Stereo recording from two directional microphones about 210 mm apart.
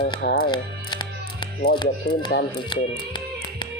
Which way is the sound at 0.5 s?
20° left (ahead or behind).